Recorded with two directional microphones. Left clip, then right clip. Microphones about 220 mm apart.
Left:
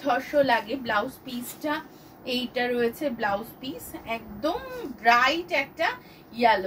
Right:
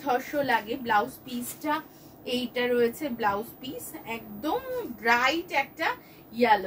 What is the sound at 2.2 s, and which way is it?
A woman's voice, 15° right (ahead or behind).